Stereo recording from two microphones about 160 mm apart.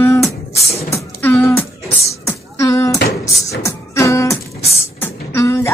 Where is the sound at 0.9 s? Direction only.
10° left (ahead or behind).